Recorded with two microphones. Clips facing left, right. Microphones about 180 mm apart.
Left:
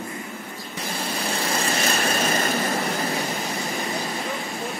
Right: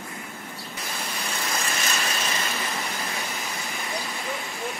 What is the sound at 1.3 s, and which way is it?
Vehicle, 30° left (ahead or behind).